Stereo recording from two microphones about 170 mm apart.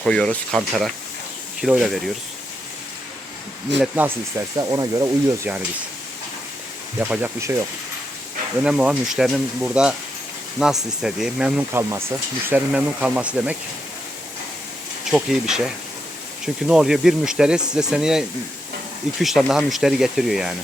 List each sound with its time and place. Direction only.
0.0 s speech: 5° left (ahead or behind)
3.7 s speech: 90° right
4.5 s speech: 20° right (ahead or behind)
7.0 s speech: 10° right (ahead or behind)
8.6 s speech: 5° right (ahead or behind)
15.0 s speech: 5° right (ahead or behind)